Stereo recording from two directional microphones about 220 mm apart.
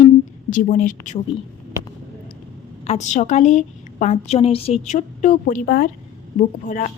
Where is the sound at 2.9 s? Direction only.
30° left (ahead or behind).